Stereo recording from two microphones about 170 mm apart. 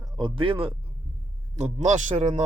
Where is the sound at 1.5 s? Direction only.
40° right (ahead or behind).